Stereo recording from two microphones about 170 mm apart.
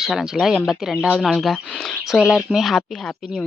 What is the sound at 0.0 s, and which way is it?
Speech, 5° right (ahead or behind).